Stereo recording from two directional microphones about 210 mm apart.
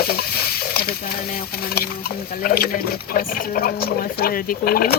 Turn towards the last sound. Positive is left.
turn(degrees=45)  # may be behind; listen again after turning